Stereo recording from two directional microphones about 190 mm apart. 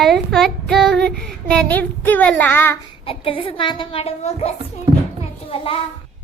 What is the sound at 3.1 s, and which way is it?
A child's voice, 30° left (ahead or behind).